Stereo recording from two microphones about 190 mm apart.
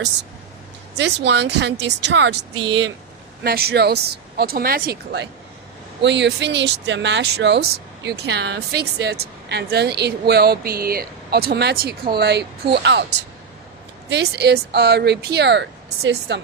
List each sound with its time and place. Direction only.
0.9 s speech: 65° right (ahead or behind)
3.4 s speech: 55° right (ahead or behind)
6.0 s speech: 65° right (ahead or behind)